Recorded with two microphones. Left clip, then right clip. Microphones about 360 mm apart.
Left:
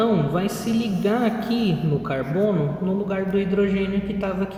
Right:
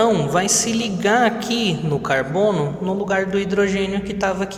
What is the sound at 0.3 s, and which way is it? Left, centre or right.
A man's voice, centre.